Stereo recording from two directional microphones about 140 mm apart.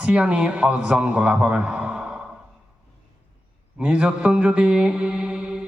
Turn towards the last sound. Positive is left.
turn(degrees=-5)  # may be behind; listen again after turning